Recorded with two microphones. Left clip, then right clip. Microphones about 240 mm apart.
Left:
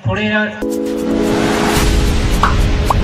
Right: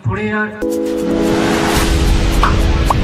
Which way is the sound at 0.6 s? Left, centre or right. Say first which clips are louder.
Right 1 dB; centre.